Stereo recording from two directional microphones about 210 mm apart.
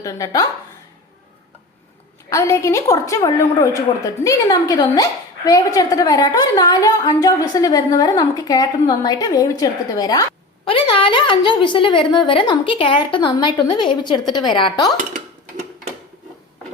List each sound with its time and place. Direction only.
0.0 s a woman's voice: 15° left (ahead or behind)
2.3 s a woman's voice: 15° left (ahead or behind)